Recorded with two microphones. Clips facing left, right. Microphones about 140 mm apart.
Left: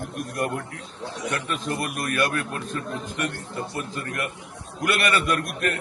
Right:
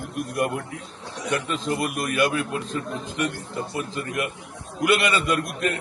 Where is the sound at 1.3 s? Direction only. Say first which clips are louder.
Right 4 dB; 15° right (ahead or behind).